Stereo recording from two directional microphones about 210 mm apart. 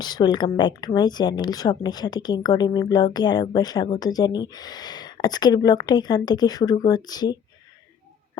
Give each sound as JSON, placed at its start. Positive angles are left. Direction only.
{"t": 0.0, "sound": "speech", "side_deg": 20}